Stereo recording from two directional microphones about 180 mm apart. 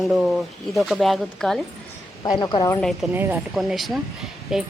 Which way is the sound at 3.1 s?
10° right (ahead or behind).